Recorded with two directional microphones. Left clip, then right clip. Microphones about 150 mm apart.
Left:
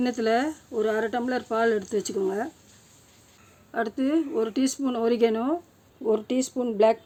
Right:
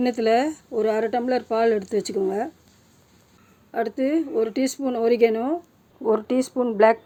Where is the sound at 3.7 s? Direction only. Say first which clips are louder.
Right 3 dB; 5° right (ahead or behind).